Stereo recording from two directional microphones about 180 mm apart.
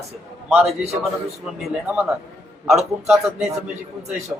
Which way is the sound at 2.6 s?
Centre (ahead or behind).